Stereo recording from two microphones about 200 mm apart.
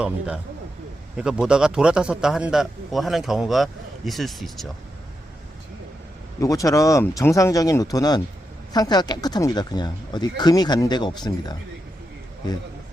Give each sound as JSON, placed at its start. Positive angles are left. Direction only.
{"t": 1.1, "sound": "a man's voice", "side_deg": -5}
{"t": 6.4, "sound": "speech", "side_deg": 15}